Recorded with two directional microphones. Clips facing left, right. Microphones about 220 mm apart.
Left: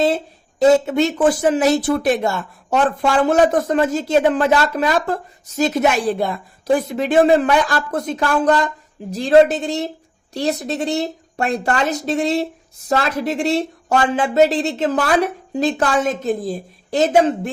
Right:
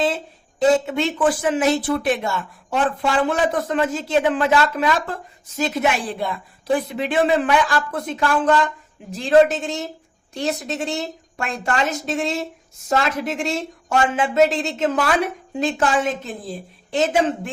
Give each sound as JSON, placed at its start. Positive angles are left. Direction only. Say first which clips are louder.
{"t": 0.9, "sound": "speech", "louder": "left 4 dB", "side_deg": 40}